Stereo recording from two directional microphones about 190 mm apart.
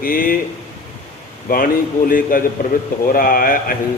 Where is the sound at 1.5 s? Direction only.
50° left (ahead or behind).